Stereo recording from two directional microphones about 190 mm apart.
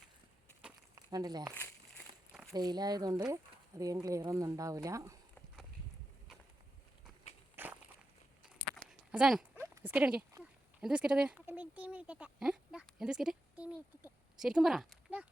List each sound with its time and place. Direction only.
0.9 s speech: 20° right (ahead or behind)
7.5 s walk: 10° right (ahead or behind)
8.7 s a sound: 5° right (ahead or behind)
10.3 s speech: 5° right (ahead or behind)